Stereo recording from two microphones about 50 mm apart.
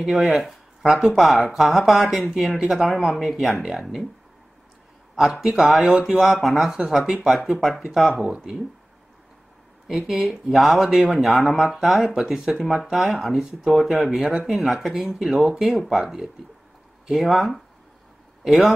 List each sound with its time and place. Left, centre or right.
0.9 s speech: centre
5.1 s speech: centre
8.3 s speech: centre
9.8 s speech: centre
14.4 s speech: centre
17.1 s speech: centre